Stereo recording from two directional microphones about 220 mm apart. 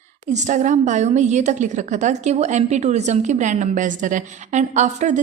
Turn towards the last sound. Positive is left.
turn(degrees=-30)  # may be behind; listen again after turning